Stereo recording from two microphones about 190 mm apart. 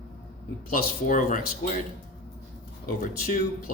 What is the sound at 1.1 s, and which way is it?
Speech, 45° left (ahead or behind).